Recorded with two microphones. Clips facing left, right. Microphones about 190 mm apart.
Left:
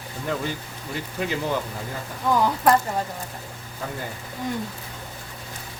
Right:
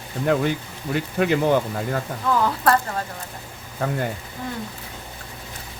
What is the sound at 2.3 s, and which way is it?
Speech, 15° left (ahead or behind).